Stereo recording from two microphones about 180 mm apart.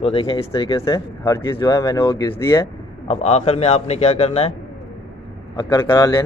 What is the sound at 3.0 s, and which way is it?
A man's voice, 35° left (ahead or behind).